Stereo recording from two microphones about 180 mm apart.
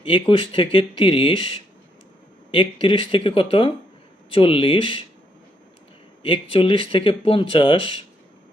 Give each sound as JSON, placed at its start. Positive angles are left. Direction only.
{"t": 0.0, "sound": "speech", "side_deg": 30}
{"t": 6.2, "sound": "speech", "side_deg": 30}